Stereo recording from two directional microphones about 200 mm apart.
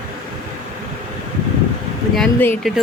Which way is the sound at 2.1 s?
5° left (ahead or behind).